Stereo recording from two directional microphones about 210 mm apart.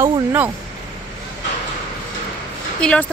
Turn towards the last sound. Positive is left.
turn(degrees=5)  # may be behind; listen again after turning